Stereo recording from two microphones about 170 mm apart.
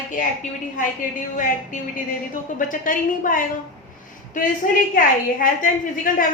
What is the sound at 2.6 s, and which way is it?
A woman's voice, 50° left (ahead or behind).